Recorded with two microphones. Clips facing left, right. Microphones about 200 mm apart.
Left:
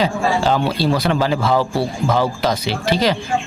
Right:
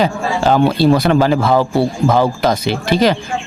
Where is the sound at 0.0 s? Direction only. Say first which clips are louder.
Right 2 dB; 50° right (ahead or behind).